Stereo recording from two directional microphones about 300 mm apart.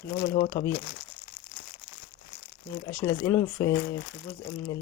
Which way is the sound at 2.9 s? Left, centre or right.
Centre.